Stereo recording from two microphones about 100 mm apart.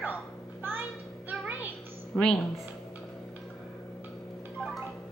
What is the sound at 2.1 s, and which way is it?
Speech, 10° left (ahead or behind).